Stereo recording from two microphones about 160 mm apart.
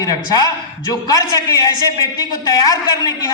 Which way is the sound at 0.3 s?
25° left (ahead or behind).